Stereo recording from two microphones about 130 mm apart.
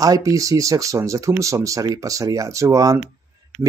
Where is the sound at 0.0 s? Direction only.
25° right (ahead or behind).